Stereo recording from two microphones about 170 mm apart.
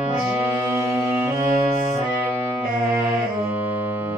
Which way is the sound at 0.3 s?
10° right (ahead or behind).